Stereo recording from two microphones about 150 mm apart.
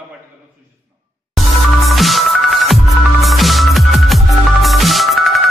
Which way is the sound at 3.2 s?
Centre (ahead or behind).